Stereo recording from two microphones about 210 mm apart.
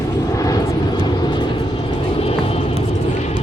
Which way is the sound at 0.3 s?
15° left (ahead or behind).